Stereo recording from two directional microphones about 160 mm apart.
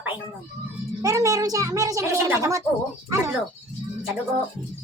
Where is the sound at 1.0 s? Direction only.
20° right (ahead or behind).